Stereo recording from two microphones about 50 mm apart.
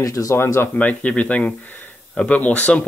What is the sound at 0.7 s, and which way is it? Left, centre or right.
Speech, left.